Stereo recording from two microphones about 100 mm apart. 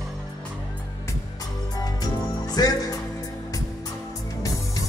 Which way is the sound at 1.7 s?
40° left (ahead or behind).